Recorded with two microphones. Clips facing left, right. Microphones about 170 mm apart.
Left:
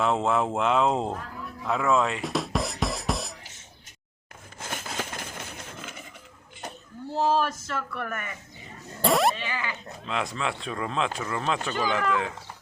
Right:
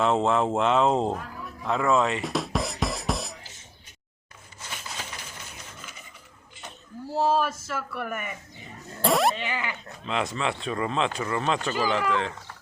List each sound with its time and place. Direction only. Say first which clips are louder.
0.0 s speech: right 2 dB; centre (ahead or behind)
4.6 s a sound: left 5 dB; 50° left (ahead or behind)
7.1 s speech: even; centre (ahead or behind)
9.0 s dog: even; centre (ahead or behind)
9.3 s speech: right 2 dB; 20° right (ahead or behind)
10.1 s speech: right 2 dB; centre (ahead or behind)